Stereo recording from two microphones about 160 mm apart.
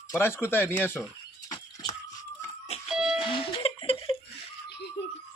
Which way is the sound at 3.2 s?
35° left (ahead or behind).